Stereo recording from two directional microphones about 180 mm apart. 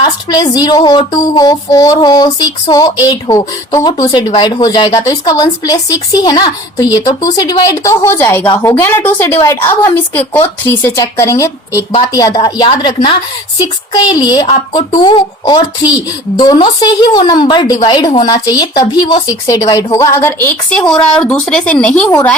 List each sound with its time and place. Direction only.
0.0 s a woman's voice: 25° left (ahead or behind)